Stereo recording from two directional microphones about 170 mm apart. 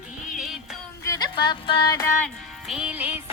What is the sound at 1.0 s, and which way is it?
Music, 20° left (ahead or behind).